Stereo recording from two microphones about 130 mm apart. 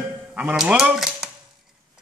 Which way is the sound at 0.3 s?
10° right (ahead or behind).